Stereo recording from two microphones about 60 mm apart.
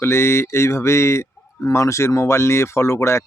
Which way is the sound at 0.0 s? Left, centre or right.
Left.